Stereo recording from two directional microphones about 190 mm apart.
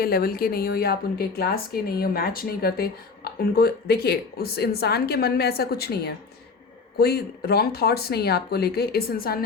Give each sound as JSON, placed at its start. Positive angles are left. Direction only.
{"t": 0.0, "sound": "a woman's voice", "side_deg": 50}